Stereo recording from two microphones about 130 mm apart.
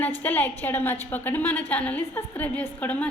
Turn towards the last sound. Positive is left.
turn(degrees=10)  # may be behind; listen again after turning